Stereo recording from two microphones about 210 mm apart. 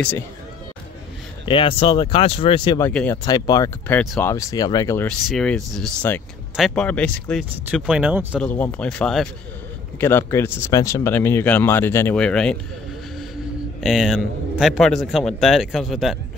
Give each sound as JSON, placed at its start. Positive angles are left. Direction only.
{"t": 1.4, "sound": "speech", "side_deg": 25}
{"t": 2.8, "sound": "speech", "side_deg": 10}
{"t": 3.3, "sound": "speech", "side_deg": 20}
{"t": 4.3, "sound": "speech", "side_deg": 15}
{"t": 5.0, "sound": "a man's voice", "side_deg": 5}
{"t": 8.4, "sound": "a man's voice", "side_deg": 10}
{"t": 13.8, "sound": "a man's voice", "side_deg": 0}